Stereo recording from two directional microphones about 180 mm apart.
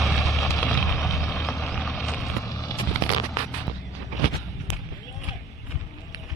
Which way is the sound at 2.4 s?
20° left (ahead or behind).